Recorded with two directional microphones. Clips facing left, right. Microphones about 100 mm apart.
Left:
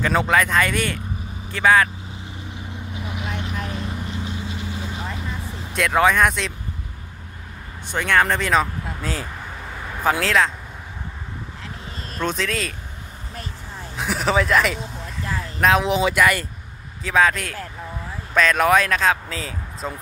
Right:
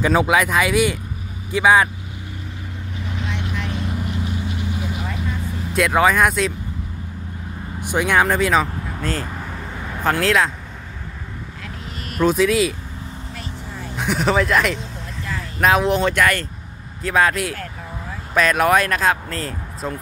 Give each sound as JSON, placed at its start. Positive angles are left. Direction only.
{"t": 0.0, "sound": "speech", "side_deg": -10}
{"t": 3.7, "sound": "vehicle", "side_deg": 0}
{"t": 4.0, "sound": "vehicle", "side_deg": -15}
{"t": 5.7, "sound": "speech", "side_deg": -5}
{"t": 7.8, "sound": "speech", "side_deg": -15}
{"t": 12.2, "sound": "speech", "side_deg": -10}
{"t": 13.9, "sound": "speech", "side_deg": 0}